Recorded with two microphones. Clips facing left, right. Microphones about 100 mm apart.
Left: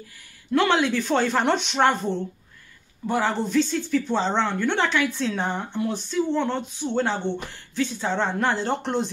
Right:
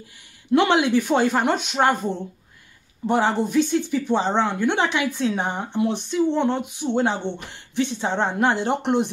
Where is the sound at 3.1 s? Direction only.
20° right (ahead or behind).